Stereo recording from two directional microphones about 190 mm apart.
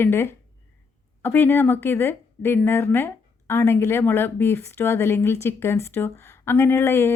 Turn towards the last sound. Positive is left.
turn(degrees=10)  # may be behind; listen again after turning